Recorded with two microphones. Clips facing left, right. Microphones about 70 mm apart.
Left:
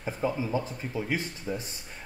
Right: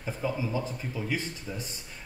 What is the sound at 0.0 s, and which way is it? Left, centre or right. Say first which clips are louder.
Speech: left 2 dB; left.